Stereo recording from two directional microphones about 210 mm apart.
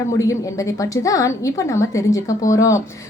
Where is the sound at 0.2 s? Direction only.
15° left (ahead or behind).